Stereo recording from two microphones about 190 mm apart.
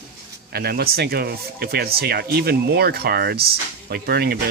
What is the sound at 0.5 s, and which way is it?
Speech, 55° right (ahead or behind).